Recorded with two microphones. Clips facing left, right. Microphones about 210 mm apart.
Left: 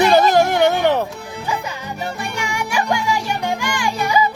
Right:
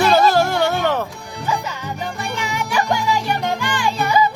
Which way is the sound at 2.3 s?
10° left (ahead or behind).